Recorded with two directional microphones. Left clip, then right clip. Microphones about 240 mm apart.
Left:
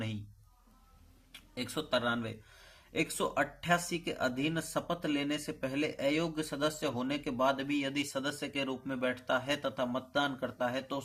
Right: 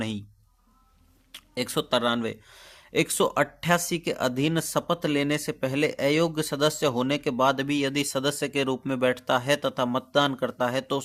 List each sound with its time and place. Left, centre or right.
1.3 s speech: right